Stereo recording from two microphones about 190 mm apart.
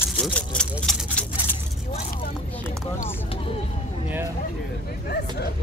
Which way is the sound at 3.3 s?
30° left (ahead or behind).